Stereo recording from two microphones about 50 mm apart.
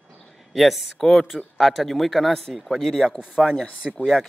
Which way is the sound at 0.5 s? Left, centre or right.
Centre.